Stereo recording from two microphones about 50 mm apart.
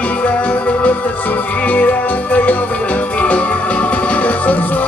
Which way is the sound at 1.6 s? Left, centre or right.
Left.